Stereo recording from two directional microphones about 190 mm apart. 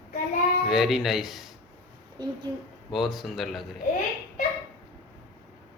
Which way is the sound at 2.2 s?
20° right (ahead or behind).